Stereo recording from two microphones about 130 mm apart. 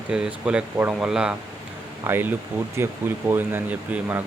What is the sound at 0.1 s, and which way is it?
Speech, 5° right (ahead or behind).